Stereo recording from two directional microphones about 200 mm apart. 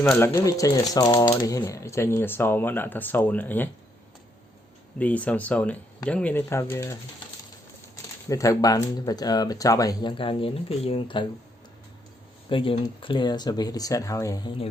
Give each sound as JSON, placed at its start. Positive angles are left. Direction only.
{"t": 0.0, "sound": "speech", "side_deg": 10}
{"t": 4.9, "sound": "speech", "side_deg": 5}
{"t": 8.3, "sound": "speech", "side_deg": 15}
{"t": 12.5, "sound": "speech", "side_deg": 25}